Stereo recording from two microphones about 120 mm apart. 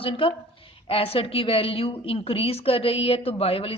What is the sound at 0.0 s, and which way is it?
A woman's voice, 50° left (ahead or behind).